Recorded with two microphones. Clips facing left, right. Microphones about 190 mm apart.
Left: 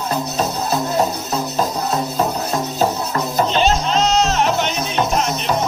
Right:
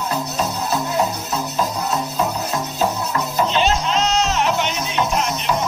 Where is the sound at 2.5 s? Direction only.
40° left (ahead or behind).